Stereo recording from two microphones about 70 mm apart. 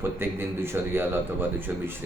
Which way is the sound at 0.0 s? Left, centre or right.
Right.